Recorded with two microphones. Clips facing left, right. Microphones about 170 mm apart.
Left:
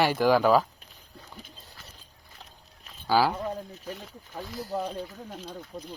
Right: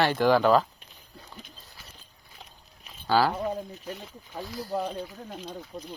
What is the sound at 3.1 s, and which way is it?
Speech, 10° left (ahead or behind).